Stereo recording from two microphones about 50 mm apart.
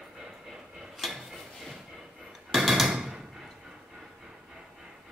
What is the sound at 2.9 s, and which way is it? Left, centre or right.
Door, centre.